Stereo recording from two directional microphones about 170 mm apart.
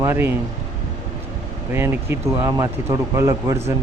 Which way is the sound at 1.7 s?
15° right (ahead or behind).